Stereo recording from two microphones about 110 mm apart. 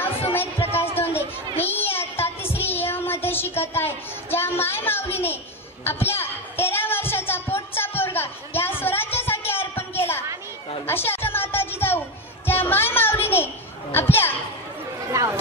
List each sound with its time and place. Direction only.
0.3 s children playing: 20° left (ahead or behind)
5.1 s a child's voice: 20° left (ahead or behind)
5.9 s a sound: 20° left (ahead or behind)
10.9 s music: 20° left (ahead or behind)
13.9 s a child's voice: 20° left (ahead or behind)
15.0 s a sound: 30° right (ahead or behind)